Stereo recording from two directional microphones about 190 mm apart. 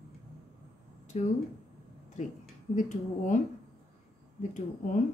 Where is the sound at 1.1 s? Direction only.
40° left (ahead or behind).